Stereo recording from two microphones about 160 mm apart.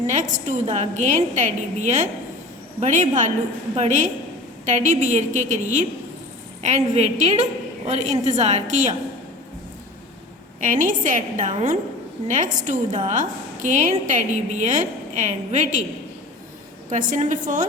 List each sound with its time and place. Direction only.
0.1 s a woman's voice: 50° right (ahead or behind)
10.6 s a woman's voice: 55° right (ahead or behind)
16.9 s a woman's voice: 55° right (ahead or behind)